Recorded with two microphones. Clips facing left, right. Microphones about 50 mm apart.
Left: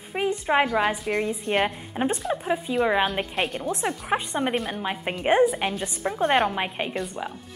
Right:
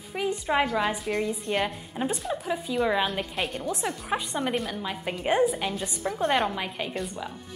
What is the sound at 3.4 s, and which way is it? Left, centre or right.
Speech, centre.